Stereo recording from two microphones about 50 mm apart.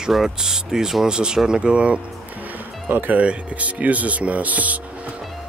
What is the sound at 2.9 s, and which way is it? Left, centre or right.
Speech, right.